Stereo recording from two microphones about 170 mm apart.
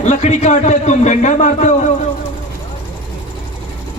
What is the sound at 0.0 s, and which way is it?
A man's voice, 40° left (ahead or behind).